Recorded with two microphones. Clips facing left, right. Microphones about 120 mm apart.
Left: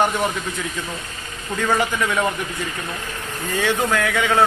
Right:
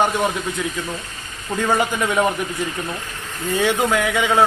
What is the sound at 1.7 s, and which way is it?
Speech, 15° right (ahead or behind).